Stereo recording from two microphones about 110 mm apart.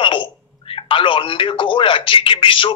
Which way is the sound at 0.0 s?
50° left (ahead or behind).